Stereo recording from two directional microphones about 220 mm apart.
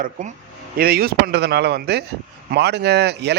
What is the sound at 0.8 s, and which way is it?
Speech, 45° right (ahead or behind).